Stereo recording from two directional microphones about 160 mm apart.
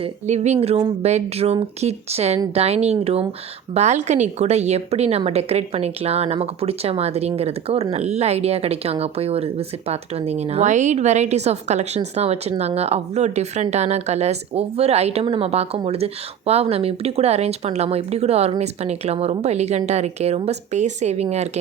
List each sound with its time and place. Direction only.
0.0 s a woman's voice: 45° right (ahead or behind)